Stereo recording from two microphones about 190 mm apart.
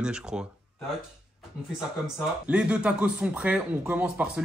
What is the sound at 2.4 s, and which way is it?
Speech, 5° right (ahead or behind).